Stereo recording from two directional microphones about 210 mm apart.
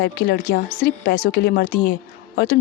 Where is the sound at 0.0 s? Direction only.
50° left (ahead or behind).